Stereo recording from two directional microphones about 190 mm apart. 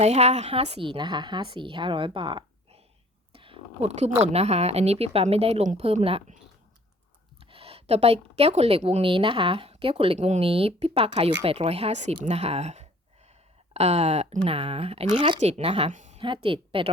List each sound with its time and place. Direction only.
0.0 s a woman's voice: 35° right (ahead or behind)
3.3 s a sound: 30° right (ahead or behind)
4.2 s speech: 35° right (ahead or behind)
16.2 s a woman's voice: 25° right (ahead or behind)